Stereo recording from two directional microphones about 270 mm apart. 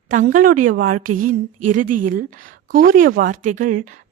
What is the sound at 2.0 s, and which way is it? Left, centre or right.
Speech, right.